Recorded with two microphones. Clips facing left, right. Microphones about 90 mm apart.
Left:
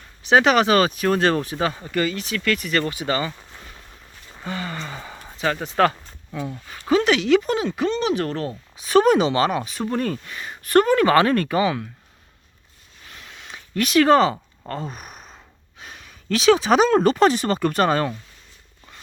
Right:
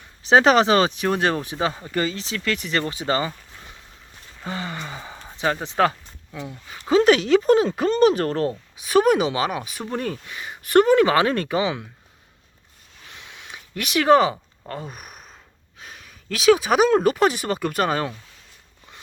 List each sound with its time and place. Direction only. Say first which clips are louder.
0.2 s speech: right 1 dB; 30° right (ahead or behind)
4.7 s gasp: left 1 dB; 15° right (ahead or behind)
5.4 s speech: left 1 dB; 20° right (ahead or behind)
7.0 s speech: right 3 dB; 40° right (ahead or behind)
8.8 s speech: left 2 dB; 5° right (ahead or behind)
13.1 s a sound: left 1 dB; 10° right (ahead or behind)
15.8 s speech: left 1 dB; centre (ahead or behind)